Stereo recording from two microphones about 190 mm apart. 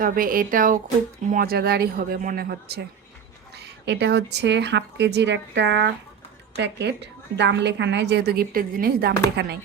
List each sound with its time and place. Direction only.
0.0 s a woman's voice: 50° right (ahead or behind)